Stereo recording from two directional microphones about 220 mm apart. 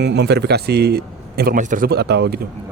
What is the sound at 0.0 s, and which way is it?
A man's voice, 50° right (ahead or behind).